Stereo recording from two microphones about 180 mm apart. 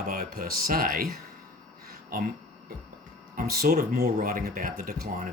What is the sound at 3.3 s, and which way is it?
Speech, 55° right (ahead or behind).